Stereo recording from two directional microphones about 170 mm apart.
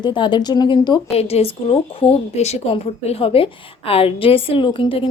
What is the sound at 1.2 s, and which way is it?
A woman's voice, 35° left (ahead or behind).